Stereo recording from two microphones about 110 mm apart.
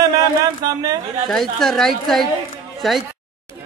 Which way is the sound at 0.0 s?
35° right (ahead or behind).